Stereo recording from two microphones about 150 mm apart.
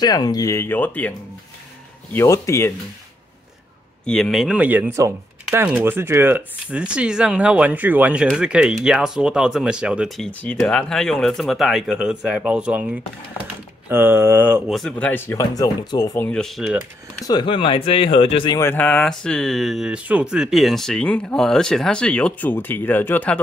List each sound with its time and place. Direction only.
0.0 s speech: 25° left (ahead or behind); by 1.1 s 10° left (ahead or behind)
2.1 s speech: 20° left (ahead or behind)
4.0 s speech: 5° left (ahead or behind); by 14.6 s 15° right (ahead or behind)
14.7 s speech: 5° left (ahead or behind); by 16.3 s 25° left (ahead or behind)
16.3 s speech: 5° left (ahead or behind)
17.3 s speech: 30° left (ahead or behind)
18.6 s speech: 15° left (ahead or behind)